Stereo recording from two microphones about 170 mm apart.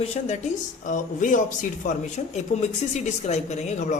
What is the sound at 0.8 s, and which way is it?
A man's voice, 50° left (ahead or behind).